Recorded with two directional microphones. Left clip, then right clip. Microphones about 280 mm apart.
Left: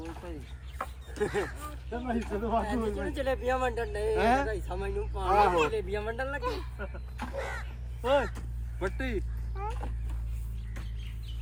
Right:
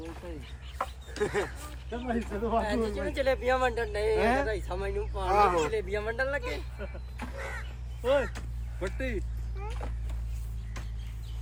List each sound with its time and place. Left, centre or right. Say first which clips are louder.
0.0 s chicken: even; centre
1.1 s speech: even; centre
6.4 s speech: left 3 dB; centre
6.7 s a sound: left 1 dB; centre
8.0 s speech: even; centre
8.8 s vehicle: left 1 dB; centre